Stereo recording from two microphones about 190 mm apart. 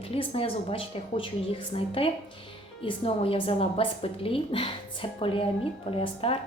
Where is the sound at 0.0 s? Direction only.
30° left (ahead or behind).